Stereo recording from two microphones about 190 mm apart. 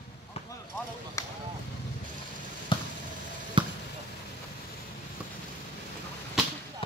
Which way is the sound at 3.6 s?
25° right (ahead or behind).